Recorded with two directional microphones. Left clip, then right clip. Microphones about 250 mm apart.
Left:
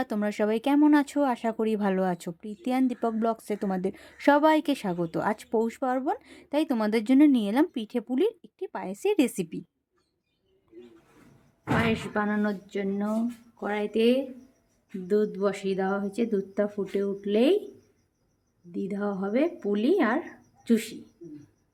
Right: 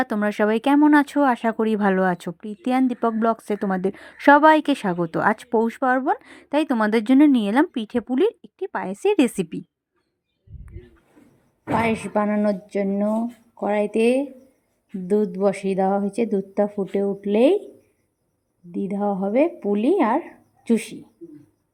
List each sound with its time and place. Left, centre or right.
0.0 s speech: centre
11.8 s a woman's voice: right
18.7 s speech: centre